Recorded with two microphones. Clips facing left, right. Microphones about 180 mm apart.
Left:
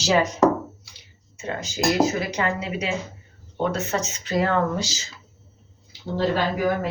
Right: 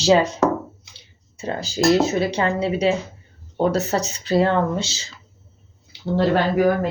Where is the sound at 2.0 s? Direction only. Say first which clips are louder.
Right 2 dB; 30° right (ahead or behind).